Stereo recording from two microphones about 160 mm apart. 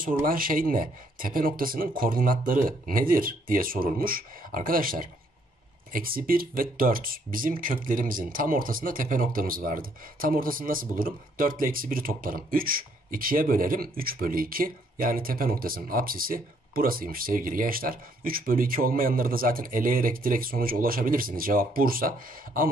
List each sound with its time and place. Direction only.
0.0 s speech: 60° right (ahead or behind)